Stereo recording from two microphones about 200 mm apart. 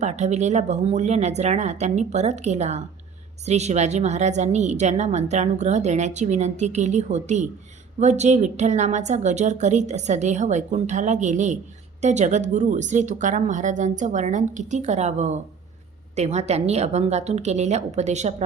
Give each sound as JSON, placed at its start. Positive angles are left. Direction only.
{"t": 0.0, "sound": "a woman's voice", "side_deg": -35}